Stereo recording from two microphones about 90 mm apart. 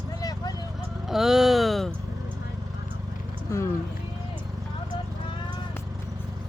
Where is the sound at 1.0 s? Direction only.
5° right (ahead or behind).